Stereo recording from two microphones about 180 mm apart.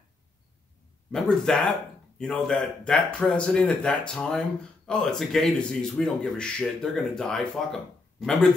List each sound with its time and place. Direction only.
1.1 s speech: 5° left (ahead or behind)